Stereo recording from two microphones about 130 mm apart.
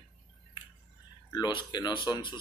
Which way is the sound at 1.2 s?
35° left (ahead or behind).